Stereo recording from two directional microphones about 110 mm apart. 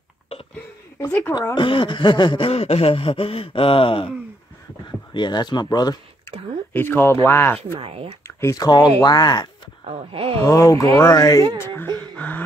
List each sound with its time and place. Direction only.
0.9 s speech: 20° left (ahead or behind)
1.5 s a sound: 50° left (ahead or behind)
5.1 s speech: 40° left (ahead or behind)
6.7 s speech: 20° left (ahead or behind)
7.8 s speech: 60° right (ahead or behind)
8.4 s speech: 30° left (ahead or behind)
9.8 s speech: 60° right (ahead or behind)
10.4 s speech: 30° left (ahead or behind)
11.6 s whimper: 20° left (ahead or behind)
12.2 s a sound: 15° left (ahead or behind)